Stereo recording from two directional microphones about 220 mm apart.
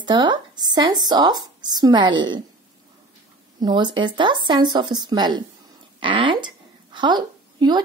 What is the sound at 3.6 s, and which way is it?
Speech, 20° right (ahead or behind).